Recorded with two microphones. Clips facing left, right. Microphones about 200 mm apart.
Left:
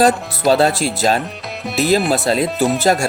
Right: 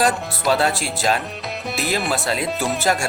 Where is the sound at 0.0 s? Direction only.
35° left (ahead or behind).